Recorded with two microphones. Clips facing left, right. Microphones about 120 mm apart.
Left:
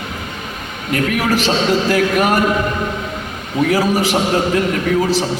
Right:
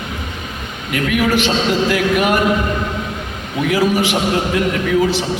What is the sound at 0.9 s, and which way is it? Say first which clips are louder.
A man's voice: right 1 dB; 40° left (ahead or behind).